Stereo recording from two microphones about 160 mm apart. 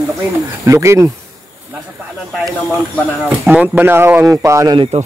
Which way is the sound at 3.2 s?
5° right (ahead or behind).